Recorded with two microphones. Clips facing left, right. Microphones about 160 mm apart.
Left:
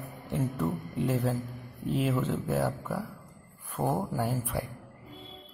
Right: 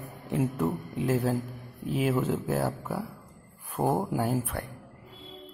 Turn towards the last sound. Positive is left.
turn(degrees=5)  # may be behind; listen again after turning